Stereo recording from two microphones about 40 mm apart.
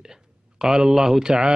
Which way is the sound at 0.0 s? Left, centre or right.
Centre.